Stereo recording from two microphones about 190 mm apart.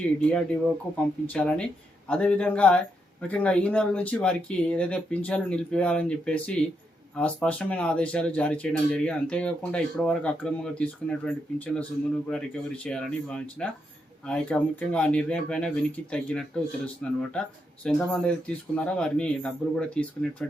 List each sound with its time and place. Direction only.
0.9 s speech: 5° left (ahead or behind)